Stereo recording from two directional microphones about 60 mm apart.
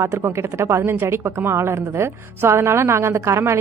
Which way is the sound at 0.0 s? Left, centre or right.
Right.